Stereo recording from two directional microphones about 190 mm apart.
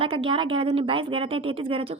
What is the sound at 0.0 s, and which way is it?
Speech, 30° right (ahead or behind).